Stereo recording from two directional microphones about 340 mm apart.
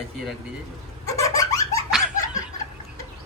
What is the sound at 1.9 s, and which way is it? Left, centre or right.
Laughter, centre.